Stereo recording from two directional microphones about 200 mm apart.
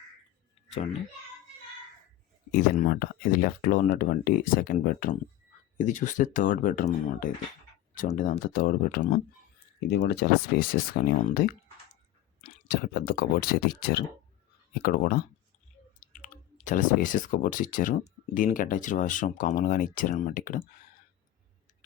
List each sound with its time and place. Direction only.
2.5 s speech: 45° left (ahead or behind)